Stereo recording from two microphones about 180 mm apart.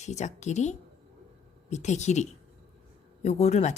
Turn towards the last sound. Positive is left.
turn(degrees=40)  # may be behind; listen again after turning